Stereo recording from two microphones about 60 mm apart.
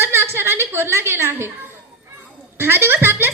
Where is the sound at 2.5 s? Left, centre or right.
Right.